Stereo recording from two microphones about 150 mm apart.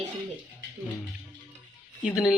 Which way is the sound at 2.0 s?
5° right (ahead or behind).